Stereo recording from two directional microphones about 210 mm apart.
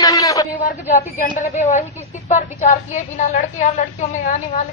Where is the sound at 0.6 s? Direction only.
35° left (ahead or behind).